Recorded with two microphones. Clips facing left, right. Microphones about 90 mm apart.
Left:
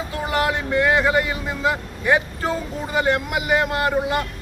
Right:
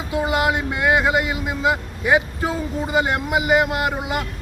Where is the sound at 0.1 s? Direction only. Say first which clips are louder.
Right 3 dB; 15° right (ahead or behind).